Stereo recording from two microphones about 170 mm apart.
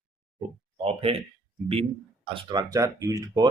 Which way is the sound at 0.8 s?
35° right (ahead or behind).